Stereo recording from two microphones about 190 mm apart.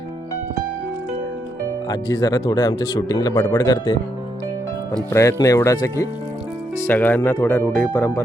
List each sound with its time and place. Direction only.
1.9 s speech: 20° left (ahead or behind)
5.1 s speech: 15° left (ahead or behind)